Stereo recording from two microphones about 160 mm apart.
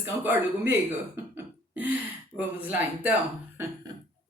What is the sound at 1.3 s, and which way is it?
Beatboxing, 10° right (ahead or behind).